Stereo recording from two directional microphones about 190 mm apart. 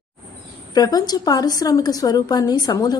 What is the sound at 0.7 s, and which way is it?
A woman's voice, 20° left (ahead or behind).